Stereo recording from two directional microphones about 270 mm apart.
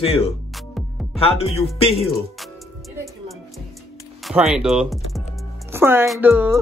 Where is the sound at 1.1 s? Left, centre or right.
Left.